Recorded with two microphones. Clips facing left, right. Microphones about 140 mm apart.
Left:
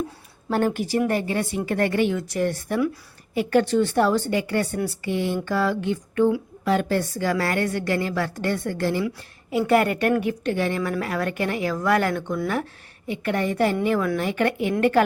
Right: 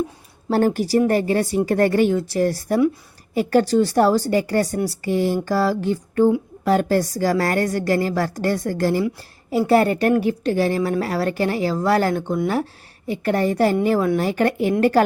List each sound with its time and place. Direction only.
0.5 s a woman's voice: 35° right (ahead or behind)